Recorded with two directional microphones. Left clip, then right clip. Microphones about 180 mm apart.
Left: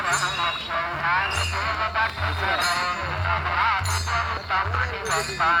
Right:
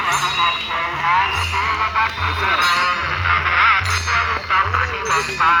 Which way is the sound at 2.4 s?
65° left (ahead or behind).